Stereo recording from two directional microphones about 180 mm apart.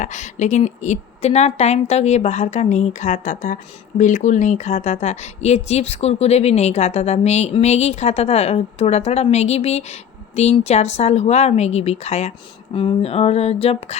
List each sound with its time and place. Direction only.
0.0 s a woman's voice: 45° left (ahead or behind)